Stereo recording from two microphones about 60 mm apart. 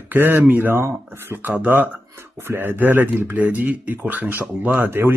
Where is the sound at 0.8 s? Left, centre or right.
Right.